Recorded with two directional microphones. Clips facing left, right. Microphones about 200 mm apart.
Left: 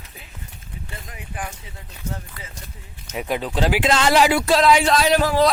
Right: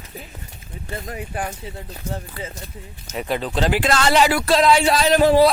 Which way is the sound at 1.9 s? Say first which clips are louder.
Even; 30° right (ahead or behind).